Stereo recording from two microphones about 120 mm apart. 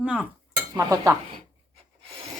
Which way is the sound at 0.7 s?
30° right (ahead or behind).